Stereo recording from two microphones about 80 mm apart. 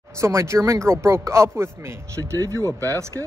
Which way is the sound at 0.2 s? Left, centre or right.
Right.